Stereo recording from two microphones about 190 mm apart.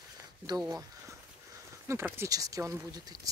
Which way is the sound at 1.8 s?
15° right (ahead or behind).